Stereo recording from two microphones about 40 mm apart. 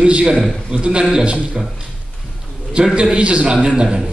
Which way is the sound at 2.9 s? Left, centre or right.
Right.